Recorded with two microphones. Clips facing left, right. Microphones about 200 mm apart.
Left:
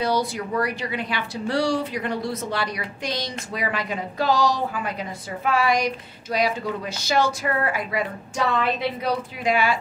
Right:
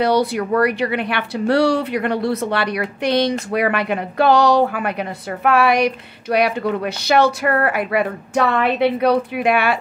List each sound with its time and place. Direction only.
0.0 s speech: 65° right (ahead or behind)